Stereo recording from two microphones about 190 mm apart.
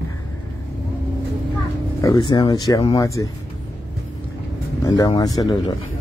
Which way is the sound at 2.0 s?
20° left (ahead or behind).